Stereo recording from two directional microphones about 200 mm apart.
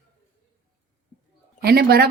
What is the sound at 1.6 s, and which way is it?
Speech, 50° right (ahead or behind).